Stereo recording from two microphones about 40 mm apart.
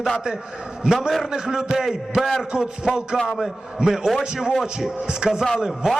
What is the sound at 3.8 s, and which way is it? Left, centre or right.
A man's voice, centre.